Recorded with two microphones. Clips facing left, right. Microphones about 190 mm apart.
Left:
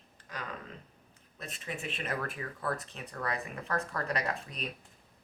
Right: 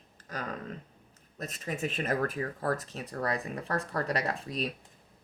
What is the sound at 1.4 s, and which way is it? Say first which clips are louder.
Speech: right 6 dB; 40° right (ahead or behind).